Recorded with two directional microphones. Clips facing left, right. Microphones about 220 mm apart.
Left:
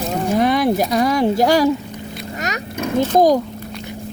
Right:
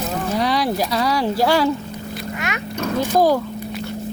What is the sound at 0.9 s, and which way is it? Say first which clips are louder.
Speech: left 4 dB; 20° left (ahead or behind).